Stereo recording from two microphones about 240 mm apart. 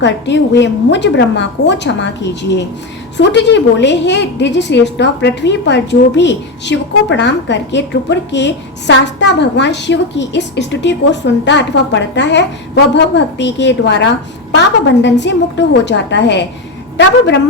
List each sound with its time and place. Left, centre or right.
0.0 s a woman's voice: left
15.0 s a woman's voice: left